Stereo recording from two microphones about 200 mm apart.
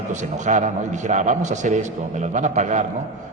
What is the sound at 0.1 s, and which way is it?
A man's voice, 35° right (ahead or behind).